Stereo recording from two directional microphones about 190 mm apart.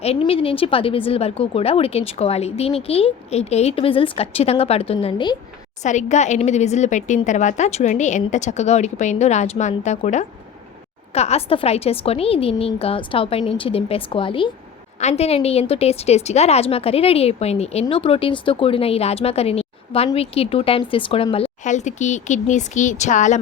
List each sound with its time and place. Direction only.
0.0 s speech: 30° left (ahead or behind)
5.8 s speech: 40° left (ahead or behind)